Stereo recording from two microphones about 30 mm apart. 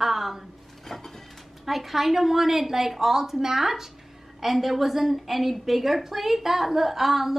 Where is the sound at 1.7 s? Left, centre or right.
Centre.